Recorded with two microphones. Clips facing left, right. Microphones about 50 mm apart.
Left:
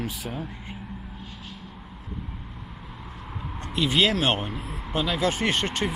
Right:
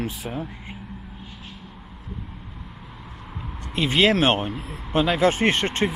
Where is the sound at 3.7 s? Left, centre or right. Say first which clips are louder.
Right 3 dB; right.